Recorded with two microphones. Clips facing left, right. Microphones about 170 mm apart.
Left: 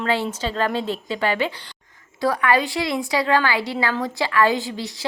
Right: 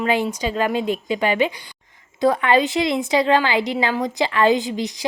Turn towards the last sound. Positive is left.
turn(degrees=-20)  # may be behind; listen again after turning